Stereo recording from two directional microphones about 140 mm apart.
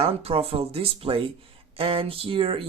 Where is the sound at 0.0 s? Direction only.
45° right (ahead or behind).